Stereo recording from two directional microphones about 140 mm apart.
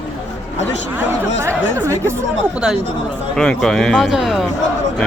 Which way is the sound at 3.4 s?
5° left (ahead or behind).